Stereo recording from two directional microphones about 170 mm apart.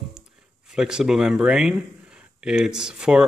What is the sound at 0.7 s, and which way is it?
A man's voice, 5° right (ahead or behind).